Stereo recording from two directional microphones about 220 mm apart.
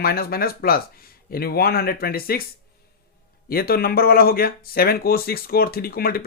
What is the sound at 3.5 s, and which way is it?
Speech, 45° left (ahead or behind).